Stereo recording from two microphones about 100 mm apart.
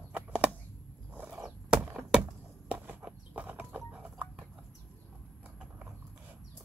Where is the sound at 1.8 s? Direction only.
10° right (ahead or behind).